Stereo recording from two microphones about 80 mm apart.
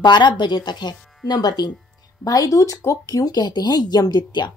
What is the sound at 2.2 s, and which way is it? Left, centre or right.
A woman's voice, left.